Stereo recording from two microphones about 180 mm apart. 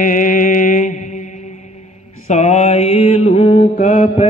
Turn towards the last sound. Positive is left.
turn(degrees=40)  # may be behind; listen again after turning